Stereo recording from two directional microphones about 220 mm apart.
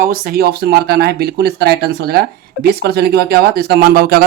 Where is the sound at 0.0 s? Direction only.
40° right (ahead or behind).